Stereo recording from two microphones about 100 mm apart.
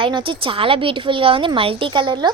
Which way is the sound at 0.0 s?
60° right (ahead or behind).